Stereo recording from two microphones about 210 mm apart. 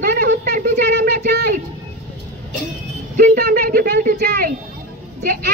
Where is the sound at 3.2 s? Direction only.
45° right (ahead or behind).